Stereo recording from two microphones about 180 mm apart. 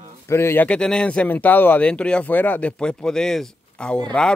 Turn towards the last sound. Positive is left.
turn(degrees=5)  # may be behind; listen again after turning